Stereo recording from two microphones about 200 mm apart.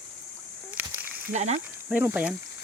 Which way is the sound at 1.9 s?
10° right (ahead or behind).